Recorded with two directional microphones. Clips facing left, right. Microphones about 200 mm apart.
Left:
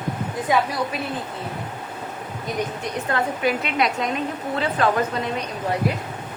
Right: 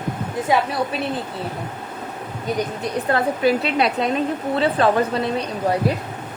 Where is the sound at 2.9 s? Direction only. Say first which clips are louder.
Right 5 dB; 35° right (ahead or behind).